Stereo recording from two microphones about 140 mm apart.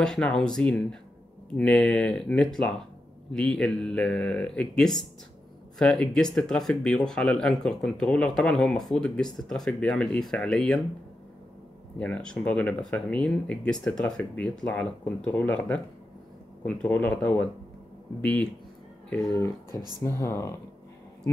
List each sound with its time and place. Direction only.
0.0 s speech: 5° left (ahead or behind)
12.0 s speech: 5° left (ahead or behind)
19.3 s speech: 20° left (ahead or behind)